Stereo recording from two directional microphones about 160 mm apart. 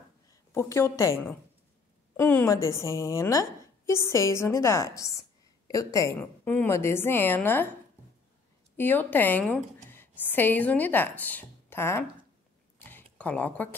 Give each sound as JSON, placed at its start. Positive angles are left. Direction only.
{"t": 0.5, "sound": "a woman's voice", "side_deg": 15}
{"t": 2.1, "sound": "a woman's voice", "side_deg": 15}
{"t": 8.7, "sound": "a woman's voice", "side_deg": 10}
{"t": 12.7, "sound": "a sound", "side_deg": 10}